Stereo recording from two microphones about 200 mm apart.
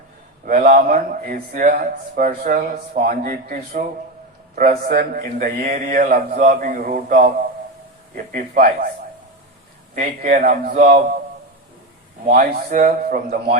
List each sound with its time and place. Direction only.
0.4 s a man's voice: 45° right (ahead or behind)
9.9 s a man's voice: 40° right (ahead or behind)
12.3 s a man's voice: 45° right (ahead or behind)